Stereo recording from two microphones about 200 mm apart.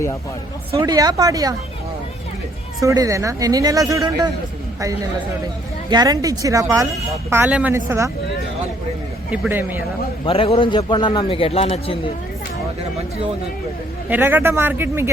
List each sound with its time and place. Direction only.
0.9 s speech: 20° right (ahead or behind)
2.8 s speech: 15° right (ahead or behind)
5.9 s speech: 20° right (ahead or behind)
9.3 s speech: 10° right (ahead or behind)
10.2 s a man's voice: 25° left (ahead or behind)
14.1 s speech: 10° right (ahead or behind)